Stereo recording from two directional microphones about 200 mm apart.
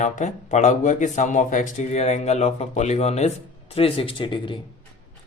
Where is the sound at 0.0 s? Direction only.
35° left (ahead or behind).